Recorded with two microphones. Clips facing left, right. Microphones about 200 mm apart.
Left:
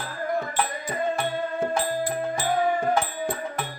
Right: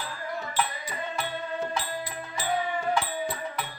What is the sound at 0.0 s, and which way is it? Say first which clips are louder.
Music: left 7 dB; 50° left (ahead or behind).